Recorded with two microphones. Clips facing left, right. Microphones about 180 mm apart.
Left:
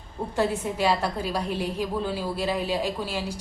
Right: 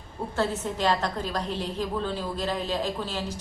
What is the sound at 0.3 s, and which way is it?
A woman's voice, 10° left (ahead or behind).